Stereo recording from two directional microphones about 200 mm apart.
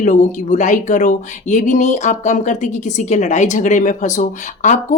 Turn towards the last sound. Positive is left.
turn(degrees=40)  # may be behind; listen again after turning